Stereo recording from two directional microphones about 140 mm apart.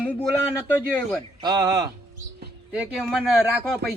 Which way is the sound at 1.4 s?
25° right (ahead or behind).